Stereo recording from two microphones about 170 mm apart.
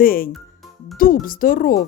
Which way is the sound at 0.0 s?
60° left (ahead or behind).